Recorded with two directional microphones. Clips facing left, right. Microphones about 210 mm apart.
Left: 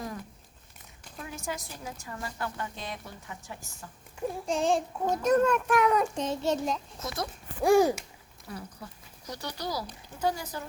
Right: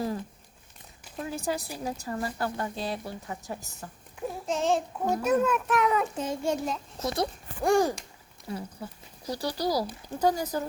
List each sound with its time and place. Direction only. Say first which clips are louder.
1.1 s speech: right 6 dB; 35° right (ahead or behind)
4.4 s a child's voice: right 1 dB; centre (ahead or behind)
7.0 s speech: right 11 dB; 30° right (ahead or behind)
7.6 s a sound: left 2 dB; 5° left (ahead or behind)
8.4 s speech: right 5 dB; 25° right (ahead or behind)